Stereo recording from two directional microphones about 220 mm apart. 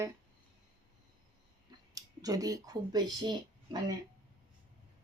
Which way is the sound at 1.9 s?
15° right (ahead or behind).